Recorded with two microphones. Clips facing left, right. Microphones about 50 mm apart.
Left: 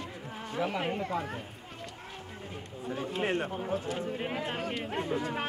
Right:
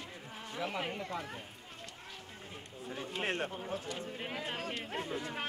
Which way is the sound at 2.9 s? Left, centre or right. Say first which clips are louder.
Left 6 dB; centre.